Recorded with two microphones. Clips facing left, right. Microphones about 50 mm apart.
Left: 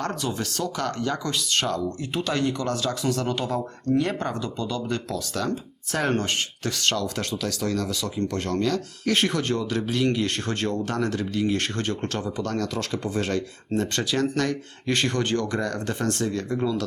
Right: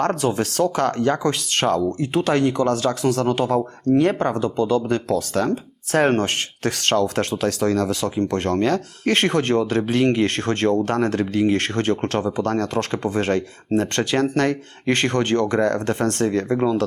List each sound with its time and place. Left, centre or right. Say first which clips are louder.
0.0 s speech: right 8 dB; right